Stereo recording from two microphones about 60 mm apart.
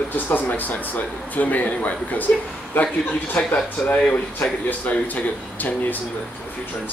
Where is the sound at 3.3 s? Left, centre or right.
Left.